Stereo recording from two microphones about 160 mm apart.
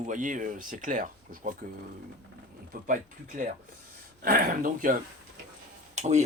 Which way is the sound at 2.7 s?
65° right (ahead or behind).